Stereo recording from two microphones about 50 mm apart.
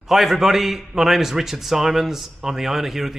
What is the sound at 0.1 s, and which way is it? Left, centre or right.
A man's voice, centre.